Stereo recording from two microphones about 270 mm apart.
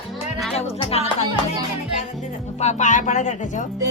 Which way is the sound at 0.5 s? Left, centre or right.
Left.